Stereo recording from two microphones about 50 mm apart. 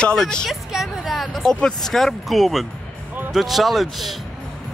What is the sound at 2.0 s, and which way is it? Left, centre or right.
A man's voice, centre.